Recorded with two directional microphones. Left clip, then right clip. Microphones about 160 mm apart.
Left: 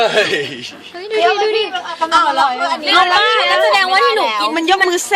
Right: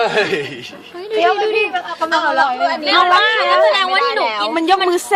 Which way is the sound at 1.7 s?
20° right (ahead or behind).